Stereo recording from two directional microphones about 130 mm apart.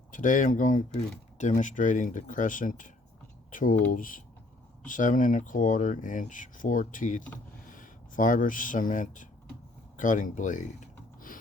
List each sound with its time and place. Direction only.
0.1 s speech: 80° left